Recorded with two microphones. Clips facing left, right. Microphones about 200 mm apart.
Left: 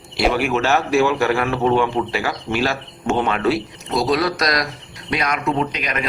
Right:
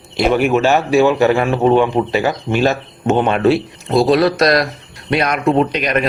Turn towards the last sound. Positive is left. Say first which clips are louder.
# right 7 dB
turn(degrees=-60)  # may be behind; listen again after turning